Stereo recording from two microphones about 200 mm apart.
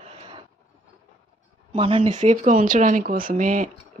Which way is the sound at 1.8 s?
25° right (ahead or behind).